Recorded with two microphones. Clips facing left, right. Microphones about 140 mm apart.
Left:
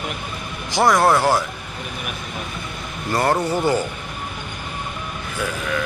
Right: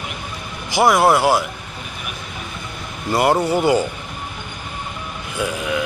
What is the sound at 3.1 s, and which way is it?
Speech, 10° right (ahead or behind).